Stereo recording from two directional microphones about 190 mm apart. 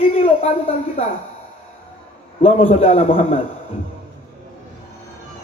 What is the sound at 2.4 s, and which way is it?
Speech, 30° left (ahead or behind).